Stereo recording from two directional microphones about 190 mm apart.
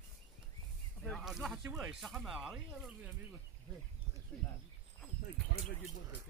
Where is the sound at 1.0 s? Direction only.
Centre (ahead or behind).